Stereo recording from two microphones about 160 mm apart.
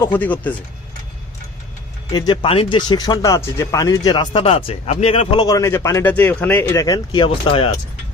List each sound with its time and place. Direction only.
0.0 s speech: 10° left (ahead or behind)
2.1 s speech: 30° left (ahead or behind)